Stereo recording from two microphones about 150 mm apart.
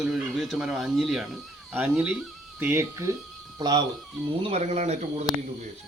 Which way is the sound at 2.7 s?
20° right (ahead or behind).